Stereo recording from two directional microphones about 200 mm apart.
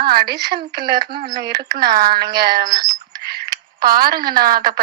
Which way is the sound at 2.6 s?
20° right (ahead or behind).